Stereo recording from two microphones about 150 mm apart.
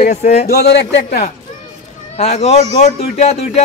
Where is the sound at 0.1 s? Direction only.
50° left (ahead or behind).